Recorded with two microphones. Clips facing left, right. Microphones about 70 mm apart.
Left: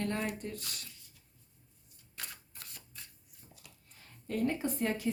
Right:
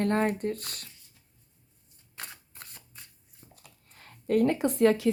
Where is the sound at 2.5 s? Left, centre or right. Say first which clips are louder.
Right 3 dB; right.